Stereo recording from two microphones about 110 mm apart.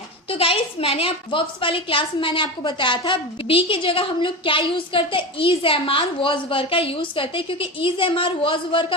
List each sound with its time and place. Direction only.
0.3 s a woman's voice: 60° left (ahead or behind)